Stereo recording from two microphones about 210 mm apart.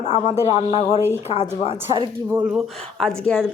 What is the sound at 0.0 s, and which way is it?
Speech, 30° left (ahead or behind).